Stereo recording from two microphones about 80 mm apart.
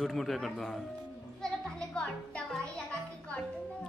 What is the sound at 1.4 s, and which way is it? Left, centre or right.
Music, centre.